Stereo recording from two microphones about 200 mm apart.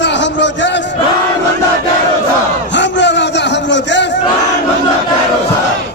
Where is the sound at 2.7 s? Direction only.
65° left (ahead or behind).